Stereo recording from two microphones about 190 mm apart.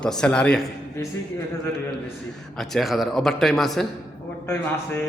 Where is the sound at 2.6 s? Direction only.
Centre (ahead or behind).